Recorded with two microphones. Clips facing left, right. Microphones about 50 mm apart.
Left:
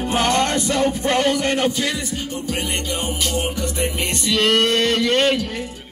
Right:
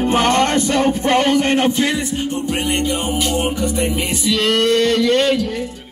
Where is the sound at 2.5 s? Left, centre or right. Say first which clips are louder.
Right 5 dB; centre.